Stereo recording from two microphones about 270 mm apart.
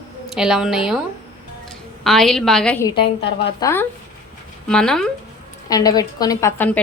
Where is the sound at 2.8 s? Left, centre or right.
Centre.